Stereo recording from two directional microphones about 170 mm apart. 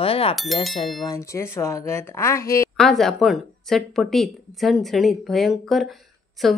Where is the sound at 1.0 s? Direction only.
15° left (ahead or behind).